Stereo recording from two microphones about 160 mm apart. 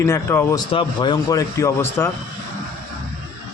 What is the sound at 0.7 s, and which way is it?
Speech, 30° left (ahead or behind).